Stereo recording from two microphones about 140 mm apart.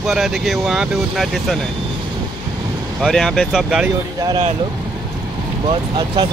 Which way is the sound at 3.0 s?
Centre (ahead or behind).